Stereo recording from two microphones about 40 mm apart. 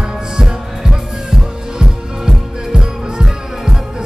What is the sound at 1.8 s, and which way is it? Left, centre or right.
Music, centre.